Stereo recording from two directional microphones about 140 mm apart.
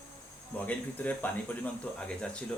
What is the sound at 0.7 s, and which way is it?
Speech, 10° left (ahead or behind).